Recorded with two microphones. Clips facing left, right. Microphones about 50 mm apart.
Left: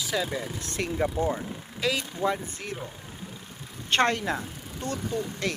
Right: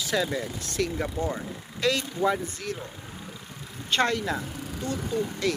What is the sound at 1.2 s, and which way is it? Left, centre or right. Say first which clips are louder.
Speech: left 2 dB; centre.